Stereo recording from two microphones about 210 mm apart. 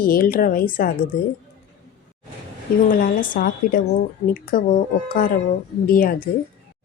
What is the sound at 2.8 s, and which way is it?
Speech, 40° left (ahead or behind).